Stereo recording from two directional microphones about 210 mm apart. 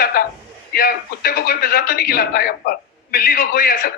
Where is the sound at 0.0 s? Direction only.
45° left (ahead or behind).